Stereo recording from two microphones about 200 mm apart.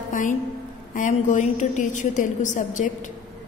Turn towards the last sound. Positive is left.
turn(degrees=40)  # may be behind; listen again after turning